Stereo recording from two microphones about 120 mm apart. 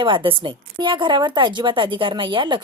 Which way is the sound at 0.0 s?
45° right (ahead or behind).